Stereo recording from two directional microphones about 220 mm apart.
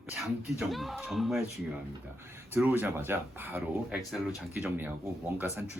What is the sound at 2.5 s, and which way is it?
Speech, 5° right (ahead or behind).